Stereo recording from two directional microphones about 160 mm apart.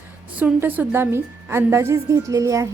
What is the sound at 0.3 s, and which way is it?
A woman's voice, 10° right (ahead or behind).